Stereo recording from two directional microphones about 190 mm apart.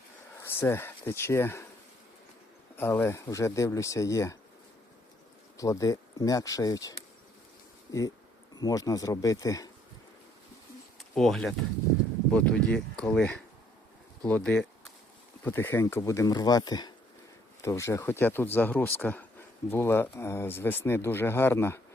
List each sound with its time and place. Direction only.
0.4 s speech: 10° left (ahead or behind)
2.7 s speech: 10° left (ahead or behind)
5.5 s speech: 20° left (ahead or behind)
11.1 s speech: centre (ahead or behind)